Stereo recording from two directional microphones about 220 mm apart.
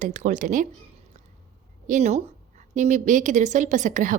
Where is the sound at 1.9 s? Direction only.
30° right (ahead or behind).